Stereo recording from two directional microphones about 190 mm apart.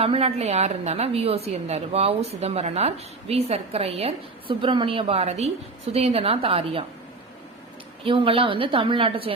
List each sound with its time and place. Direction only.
0.0 s a woman's voice: 30° right (ahead or behind)
8.0 s a woman's voice: 30° right (ahead or behind)